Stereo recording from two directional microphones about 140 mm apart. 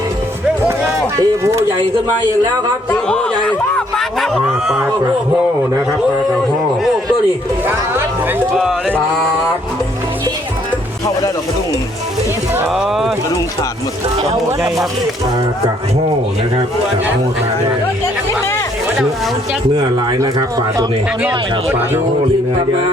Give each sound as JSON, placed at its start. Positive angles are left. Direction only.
{"t": 1.1, "sound": "speech", "side_deg": -20}
{"t": 2.9, "sound": "a sound", "side_deg": 5}
{"t": 12.6, "sound": "speech", "side_deg": -5}
{"t": 20.1, "sound": "speech", "side_deg": -25}
{"t": 21.2, "sound": "speech", "side_deg": -10}